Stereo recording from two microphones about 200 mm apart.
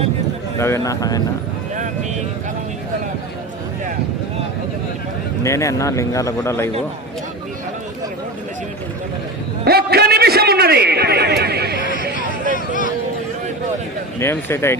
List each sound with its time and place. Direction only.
0.6 s speech: 15° left (ahead or behind)
5.4 s speech: 15° left (ahead or behind)
9.6 s a man's voice: 50° right (ahead or behind)
12.5 s speech: 40° left (ahead or behind)
14.2 s speech: 10° left (ahead or behind)